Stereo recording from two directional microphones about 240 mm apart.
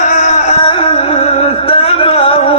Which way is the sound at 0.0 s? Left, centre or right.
Left.